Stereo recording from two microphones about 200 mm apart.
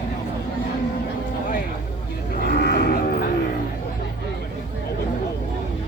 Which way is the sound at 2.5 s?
55° left (ahead or behind).